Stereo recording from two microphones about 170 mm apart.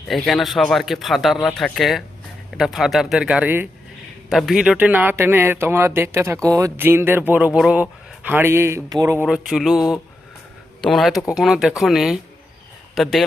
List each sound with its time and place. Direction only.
0.1 s speech: centre (ahead or behind)
4.3 s speech: centre (ahead or behind)